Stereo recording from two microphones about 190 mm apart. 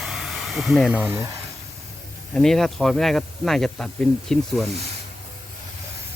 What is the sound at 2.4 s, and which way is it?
Speech, centre (ahead or behind).